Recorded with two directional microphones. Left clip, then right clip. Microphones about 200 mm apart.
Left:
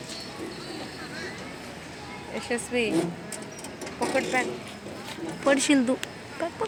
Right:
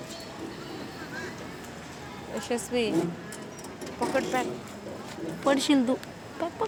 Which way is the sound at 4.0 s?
Centre (ahead or behind).